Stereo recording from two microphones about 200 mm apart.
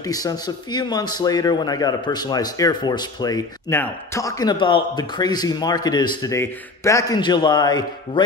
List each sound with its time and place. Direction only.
0.0 s a man's voice: 20° left (ahead or behind)